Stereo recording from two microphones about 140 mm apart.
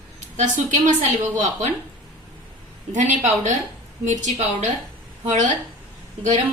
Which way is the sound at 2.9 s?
60° right (ahead or behind).